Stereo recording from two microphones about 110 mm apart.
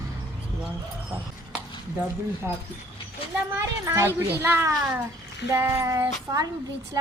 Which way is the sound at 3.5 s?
25° right (ahead or behind).